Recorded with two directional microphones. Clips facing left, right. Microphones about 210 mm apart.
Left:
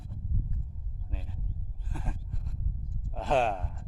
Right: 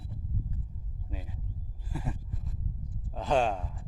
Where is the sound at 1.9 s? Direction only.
5° right (ahead or behind).